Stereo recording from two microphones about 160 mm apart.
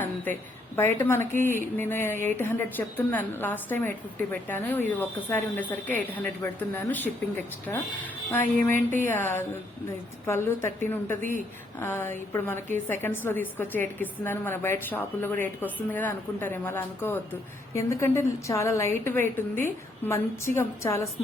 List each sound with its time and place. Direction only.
0.8 s a woman's voice: 15° left (ahead or behind)
9.0 s a woman's voice: 15° left (ahead or behind)